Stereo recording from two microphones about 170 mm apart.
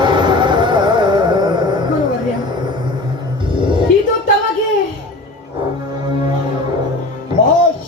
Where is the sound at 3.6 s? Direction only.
30° right (ahead or behind).